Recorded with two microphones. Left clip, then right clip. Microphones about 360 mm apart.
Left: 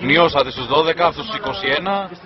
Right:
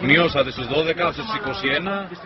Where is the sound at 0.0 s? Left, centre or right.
Centre.